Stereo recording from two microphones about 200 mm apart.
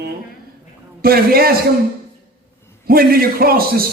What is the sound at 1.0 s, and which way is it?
Speech, 50° right (ahead or behind).